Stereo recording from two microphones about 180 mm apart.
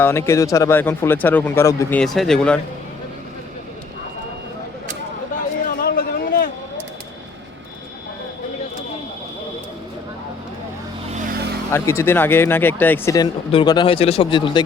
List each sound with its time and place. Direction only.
0.0 s speech: 15° left (ahead or behind)
2.0 s speech: centre (ahead or behind)
5.6 s a sound: 50° left (ahead or behind)
11.1 s vehicle: 45° right (ahead or behind)
11.7 s speech: 15° left (ahead or behind)
13.1 s speech: 25° left (ahead or behind)